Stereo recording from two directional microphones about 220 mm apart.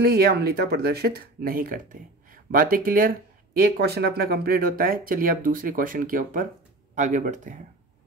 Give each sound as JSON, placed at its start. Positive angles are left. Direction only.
{"t": 0.0, "sound": "speech", "side_deg": -45}